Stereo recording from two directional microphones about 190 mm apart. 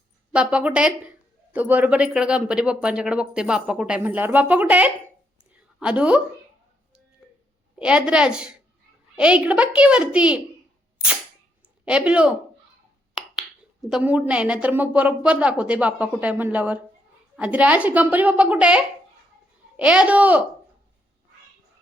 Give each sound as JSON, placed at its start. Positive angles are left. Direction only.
{"t": 0.3, "sound": "speech", "side_deg": -5}
{"t": 5.5, "sound": "a sound", "side_deg": -5}
{"t": 7.8, "sound": "speech", "side_deg": -5}
{"t": 11.6, "sound": "speech", "side_deg": -5}
{"t": 13.9, "sound": "a woman's voice", "side_deg": -5}